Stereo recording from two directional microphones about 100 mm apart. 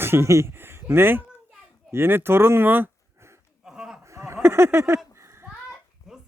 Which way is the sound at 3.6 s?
5° right (ahead or behind).